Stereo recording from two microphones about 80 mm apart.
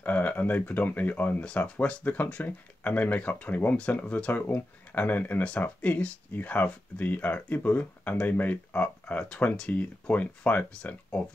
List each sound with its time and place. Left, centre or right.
0.0 s speech: left